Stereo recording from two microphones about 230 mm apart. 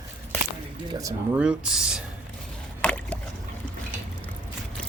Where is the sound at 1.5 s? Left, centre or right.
Centre.